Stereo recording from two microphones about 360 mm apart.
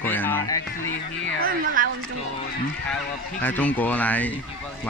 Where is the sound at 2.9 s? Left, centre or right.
Centre.